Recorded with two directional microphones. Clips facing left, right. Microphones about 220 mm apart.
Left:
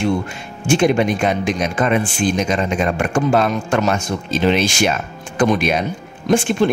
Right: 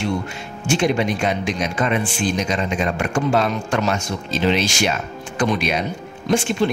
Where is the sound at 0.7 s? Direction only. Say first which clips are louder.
Left 4 dB; 50° left (ahead or behind).